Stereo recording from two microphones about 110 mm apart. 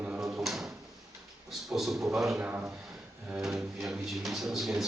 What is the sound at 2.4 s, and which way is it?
Speech, 15° right (ahead or behind).